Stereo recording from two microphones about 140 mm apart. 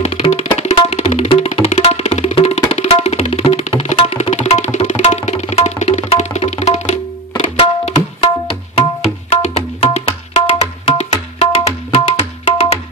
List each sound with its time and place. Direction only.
0.0 s music: 50° left (ahead or behind)
7.3 s tabla: 45° left (ahead or behind)